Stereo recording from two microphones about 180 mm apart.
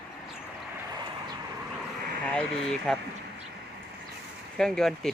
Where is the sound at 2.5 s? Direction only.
5° left (ahead or behind).